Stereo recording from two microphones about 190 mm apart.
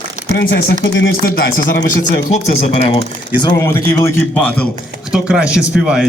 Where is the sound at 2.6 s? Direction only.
30° left (ahead or behind).